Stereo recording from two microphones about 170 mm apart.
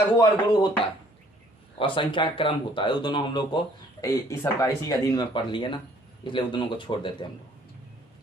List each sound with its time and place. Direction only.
0.2 s speech: 25° left (ahead or behind)
1.8 s speech: 30° left (ahead or behind)